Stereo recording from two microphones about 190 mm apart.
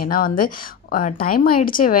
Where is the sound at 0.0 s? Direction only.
50° left (ahead or behind).